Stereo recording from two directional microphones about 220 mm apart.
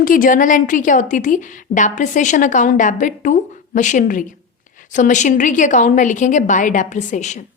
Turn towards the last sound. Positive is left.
turn(degrees=30)  # may be behind; listen again after turning